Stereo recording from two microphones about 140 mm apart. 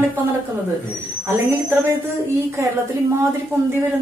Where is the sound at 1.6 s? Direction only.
15° right (ahead or behind).